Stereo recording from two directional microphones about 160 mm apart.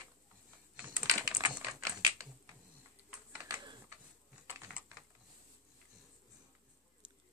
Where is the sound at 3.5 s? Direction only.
25° right (ahead or behind).